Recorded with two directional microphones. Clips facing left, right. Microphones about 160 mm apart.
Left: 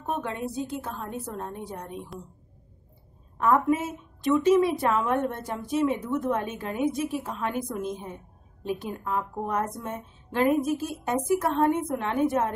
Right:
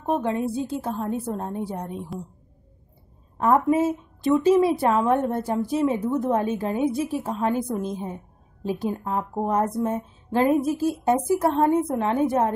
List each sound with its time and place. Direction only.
0.0 s a woman's voice: 30° right (ahead or behind)
2.1 s speech: centre (ahead or behind)
3.3 s a woman's voice: 30° right (ahead or behind)